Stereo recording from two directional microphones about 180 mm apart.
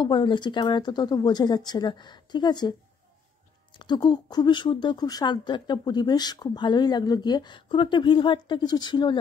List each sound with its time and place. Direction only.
0.0 s speech: 25° left (ahead or behind)
3.7 s speech: 25° left (ahead or behind)